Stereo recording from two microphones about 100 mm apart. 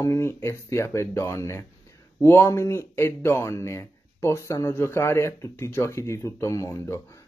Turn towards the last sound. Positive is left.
turn(degrees=30)  # may be behind; listen again after turning